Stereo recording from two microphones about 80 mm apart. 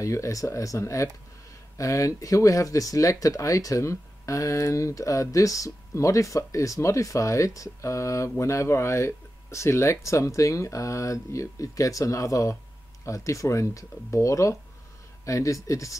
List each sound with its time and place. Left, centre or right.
0.0 s speech: left